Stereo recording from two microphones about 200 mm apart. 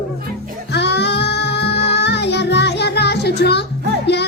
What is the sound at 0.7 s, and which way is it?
Music, 55° left (ahead or behind).